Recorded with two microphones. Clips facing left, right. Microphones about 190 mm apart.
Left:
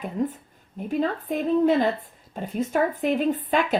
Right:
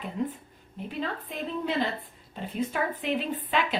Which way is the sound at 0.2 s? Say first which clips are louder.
Left 5 dB; 45° left (ahead or behind).